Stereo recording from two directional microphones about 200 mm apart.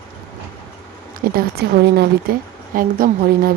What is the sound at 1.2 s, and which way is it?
Speech, 45° right (ahead or behind).